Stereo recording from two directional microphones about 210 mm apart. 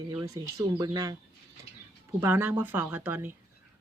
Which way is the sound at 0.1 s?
15° right (ahead or behind).